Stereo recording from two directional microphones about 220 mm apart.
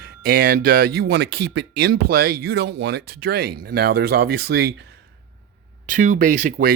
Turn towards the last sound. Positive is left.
turn(degrees=-40)  # may be behind; listen again after turning